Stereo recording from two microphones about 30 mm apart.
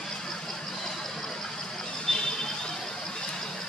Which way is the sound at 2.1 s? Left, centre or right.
Left.